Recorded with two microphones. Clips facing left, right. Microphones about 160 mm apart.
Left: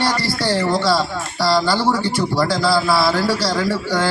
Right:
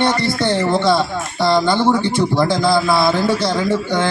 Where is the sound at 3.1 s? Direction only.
25° right (ahead or behind).